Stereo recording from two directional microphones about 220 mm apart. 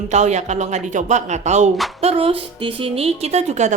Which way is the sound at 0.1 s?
30° right (ahead or behind).